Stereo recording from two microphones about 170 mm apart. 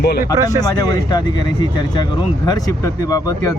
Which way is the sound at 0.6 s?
20° left (ahead or behind).